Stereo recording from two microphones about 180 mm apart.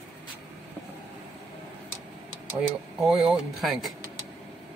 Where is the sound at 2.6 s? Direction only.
5° right (ahead or behind).